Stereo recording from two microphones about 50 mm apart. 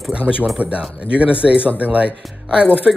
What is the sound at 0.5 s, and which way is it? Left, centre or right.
Speech, right.